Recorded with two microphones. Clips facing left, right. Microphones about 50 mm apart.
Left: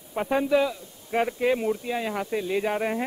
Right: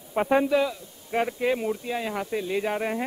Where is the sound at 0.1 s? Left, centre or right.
Centre.